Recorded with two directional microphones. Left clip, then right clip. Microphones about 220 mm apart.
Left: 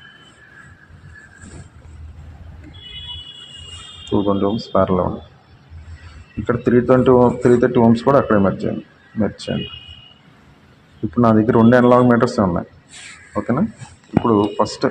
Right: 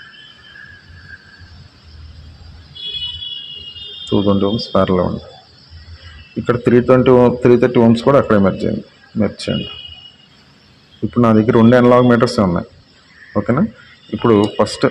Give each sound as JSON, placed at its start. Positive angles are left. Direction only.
{"t": 4.1, "sound": "a man's voice", "side_deg": -45}
{"t": 6.4, "sound": "a man's voice", "side_deg": -45}
{"t": 11.1, "sound": "a man's voice", "side_deg": -45}